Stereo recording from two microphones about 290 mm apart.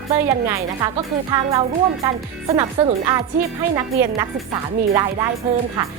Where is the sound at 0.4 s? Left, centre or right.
Centre.